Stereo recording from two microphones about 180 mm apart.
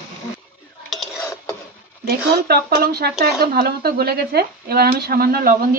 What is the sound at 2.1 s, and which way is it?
Speech, 60° right (ahead or behind).